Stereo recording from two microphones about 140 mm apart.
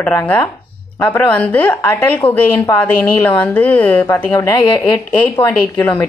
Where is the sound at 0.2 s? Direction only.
15° left (ahead or behind).